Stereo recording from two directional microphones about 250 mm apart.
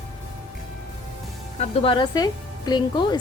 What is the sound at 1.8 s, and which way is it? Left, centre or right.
Speech, centre.